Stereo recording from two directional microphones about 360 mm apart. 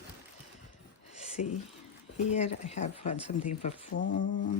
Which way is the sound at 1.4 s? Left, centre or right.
Left.